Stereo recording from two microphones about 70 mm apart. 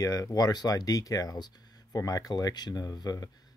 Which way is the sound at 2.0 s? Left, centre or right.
Left.